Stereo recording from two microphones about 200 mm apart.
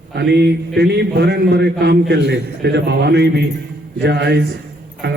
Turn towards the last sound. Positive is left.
turn(degrees=-55)  # may be behind; listen again after turning